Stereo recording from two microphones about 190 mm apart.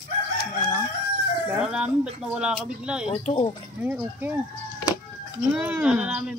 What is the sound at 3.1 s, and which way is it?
Speech, 30° left (ahead or behind).